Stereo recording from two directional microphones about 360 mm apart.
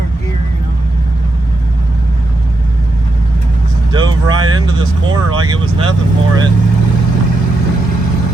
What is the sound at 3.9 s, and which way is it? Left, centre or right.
Speech, centre.